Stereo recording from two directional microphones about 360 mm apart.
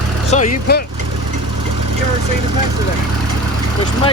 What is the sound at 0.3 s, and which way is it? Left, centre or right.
Speech, centre.